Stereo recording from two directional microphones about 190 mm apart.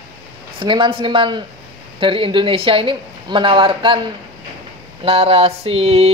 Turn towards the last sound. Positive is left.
turn(degrees=-30)  # may be behind; listen again after turning